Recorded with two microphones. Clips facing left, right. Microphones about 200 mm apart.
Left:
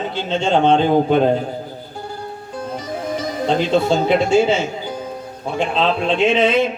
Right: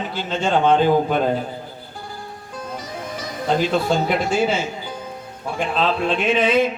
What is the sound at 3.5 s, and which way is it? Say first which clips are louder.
A man's voice: left 2 dB; 25° left (ahead or behind).